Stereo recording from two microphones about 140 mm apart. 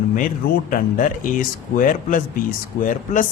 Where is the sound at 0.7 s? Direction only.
75° left (ahead or behind).